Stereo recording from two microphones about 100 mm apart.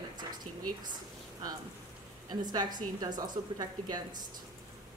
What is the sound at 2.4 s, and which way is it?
A woman's voice, 45° right (ahead or behind).